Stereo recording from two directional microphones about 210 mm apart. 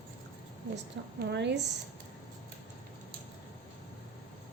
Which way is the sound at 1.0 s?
55° right (ahead or behind).